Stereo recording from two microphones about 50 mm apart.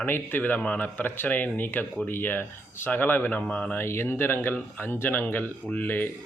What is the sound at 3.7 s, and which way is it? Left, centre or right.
Speech, left.